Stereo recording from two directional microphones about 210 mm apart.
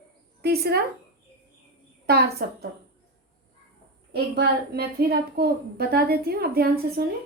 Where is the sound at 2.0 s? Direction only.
50° right (ahead or behind).